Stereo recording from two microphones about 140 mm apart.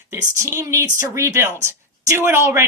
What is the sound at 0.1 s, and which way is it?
Speech, 20° right (ahead or behind).